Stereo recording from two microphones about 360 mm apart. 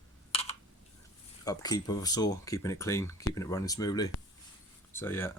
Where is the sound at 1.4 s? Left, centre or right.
Centre.